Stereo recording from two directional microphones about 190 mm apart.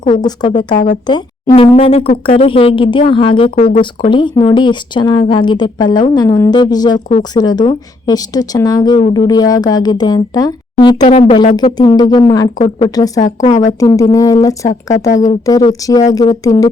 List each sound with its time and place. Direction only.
0.1 s a woman's voice: 25° left (ahead or behind)
11.0 s a woman's voice: 35° left (ahead or behind); by 12.5 s 20° left (ahead or behind)
12.5 s speech: 30° left (ahead or behind)
13.7 s speech: 15° left (ahead or behind)
14.7 s speech: 40° left (ahead or behind)
15.4 s a woman's voice: 20° left (ahead or behind)